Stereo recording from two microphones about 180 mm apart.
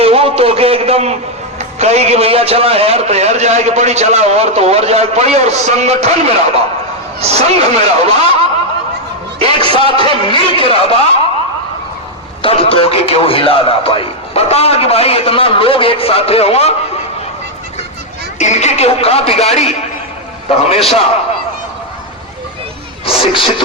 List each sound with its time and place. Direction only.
0.0 s a sound: 30° right (ahead or behind)
1.5 s a man's voice: 35° right (ahead or behind)
9.6 s a man's voice: 30° right (ahead or behind)
9.8 s a man's voice: 25° left (ahead or behind)
12.4 s a man's voice: 30° left (ahead or behind)
18.3 s a man's voice: 40° left (ahead or behind)
23.0 s speech: 30° left (ahead or behind)